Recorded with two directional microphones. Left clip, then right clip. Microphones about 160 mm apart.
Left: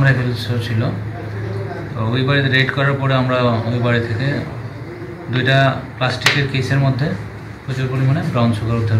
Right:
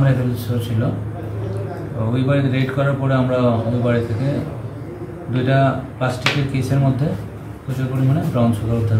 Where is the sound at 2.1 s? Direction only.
15° right (ahead or behind).